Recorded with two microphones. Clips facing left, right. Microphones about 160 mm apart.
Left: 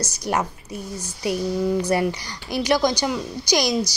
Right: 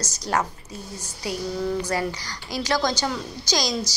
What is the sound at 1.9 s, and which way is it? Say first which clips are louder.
A woman's voice: left 5 dB; 20° left (ahead or behind).